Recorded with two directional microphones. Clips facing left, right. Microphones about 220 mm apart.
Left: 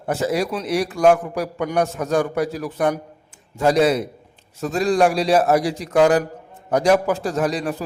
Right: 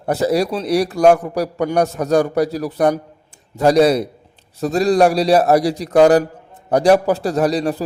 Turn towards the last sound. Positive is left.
turn(degrees=-35)  # may be behind; listen again after turning